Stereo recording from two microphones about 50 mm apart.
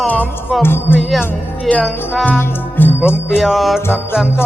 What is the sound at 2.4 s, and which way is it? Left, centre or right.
Speech, left.